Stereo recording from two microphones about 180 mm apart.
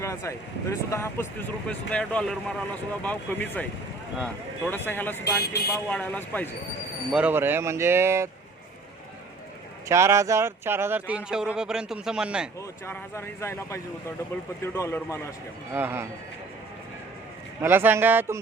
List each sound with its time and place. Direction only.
0.0 s speech: 15° left (ahead or behind)
5.2 s speech: 65° left (ahead or behind)
5.7 s speech: 10° left (ahead or behind)
7.1 s speech: 10° right (ahead or behind)
9.9 s speech: 15° right (ahead or behind)
12.8 s speech: 15° left (ahead or behind)
15.7 s speech: 10° right (ahead or behind)
17.6 s speech: 10° right (ahead or behind)